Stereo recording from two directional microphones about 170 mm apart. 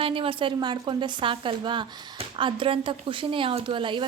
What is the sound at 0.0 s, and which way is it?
A woman's voice, 30° right (ahead or behind).